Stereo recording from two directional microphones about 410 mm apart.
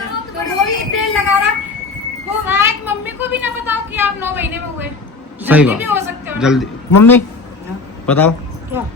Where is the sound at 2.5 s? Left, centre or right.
Centre.